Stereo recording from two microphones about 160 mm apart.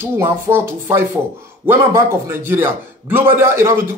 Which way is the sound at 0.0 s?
15° right (ahead or behind).